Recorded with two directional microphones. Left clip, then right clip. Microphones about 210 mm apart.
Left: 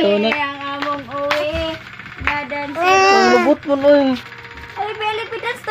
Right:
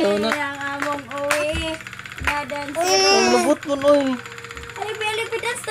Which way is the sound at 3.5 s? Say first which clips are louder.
Left 4 dB; 10° left (ahead or behind).